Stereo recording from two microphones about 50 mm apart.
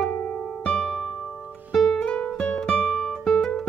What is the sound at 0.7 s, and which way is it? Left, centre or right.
Music, left.